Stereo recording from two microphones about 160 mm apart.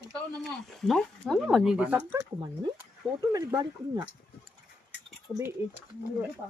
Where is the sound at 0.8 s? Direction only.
5° left (ahead or behind).